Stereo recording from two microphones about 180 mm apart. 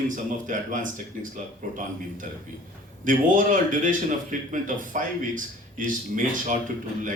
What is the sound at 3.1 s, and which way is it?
Speech, 45° right (ahead or behind).